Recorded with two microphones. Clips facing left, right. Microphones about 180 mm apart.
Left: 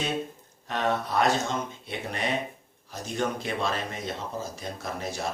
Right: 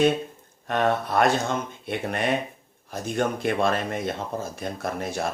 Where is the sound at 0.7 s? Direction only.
55° right (ahead or behind).